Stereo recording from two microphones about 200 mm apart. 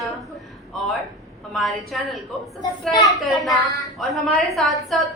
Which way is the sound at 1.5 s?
Centre (ahead or behind).